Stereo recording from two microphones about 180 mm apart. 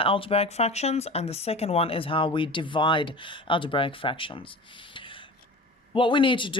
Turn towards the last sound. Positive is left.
turn(degrees=25)  # may be behind; listen again after turning